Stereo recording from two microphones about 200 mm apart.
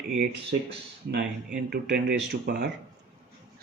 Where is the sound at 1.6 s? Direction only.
55° right (ahead or behind).